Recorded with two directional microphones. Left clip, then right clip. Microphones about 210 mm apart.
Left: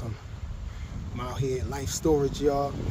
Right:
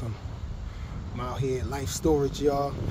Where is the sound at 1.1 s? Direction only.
5° right (ahead or behind).